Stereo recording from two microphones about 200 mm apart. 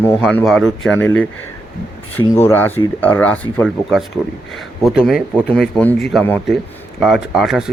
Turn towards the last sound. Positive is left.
turn(degrees=0)  # may be behind; listen again after turning